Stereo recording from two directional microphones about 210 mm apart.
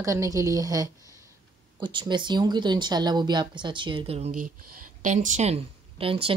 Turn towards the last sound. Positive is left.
turn(degrees=-25)  # may be behind; listen again after turning